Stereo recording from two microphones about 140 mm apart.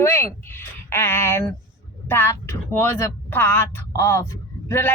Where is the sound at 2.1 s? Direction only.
15° left (ahead or behind).